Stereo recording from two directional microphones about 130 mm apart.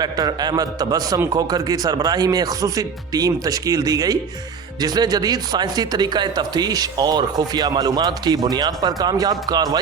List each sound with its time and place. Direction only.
0.0 s speech: 30° right (ahead or behind)